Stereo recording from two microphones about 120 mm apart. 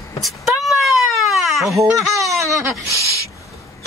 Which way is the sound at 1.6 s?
Centre (ahead or behind).